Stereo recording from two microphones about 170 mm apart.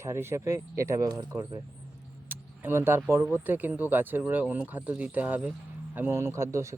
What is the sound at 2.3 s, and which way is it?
Vehicle, 15° right (ahead or behind).